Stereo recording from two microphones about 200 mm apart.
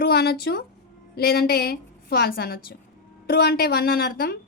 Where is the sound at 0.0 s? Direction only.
50° left (ahead or behind).